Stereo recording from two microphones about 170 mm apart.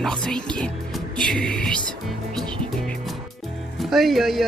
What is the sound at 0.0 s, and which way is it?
Speech, 5° left (ahead or behind).